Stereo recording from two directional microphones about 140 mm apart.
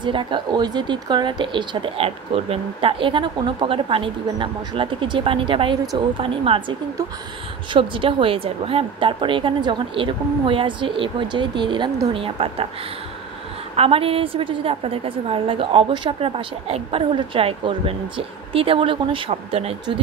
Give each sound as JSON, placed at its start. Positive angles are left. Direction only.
{"t": 0.0, "sound": "a woman's voice", "side_deg": -35}
{"t": 7.7, "sound": "a woman's voice", "side_deg": -35}
{"t": 13.7, "sound": "a woman's voice", "side_deg": -45}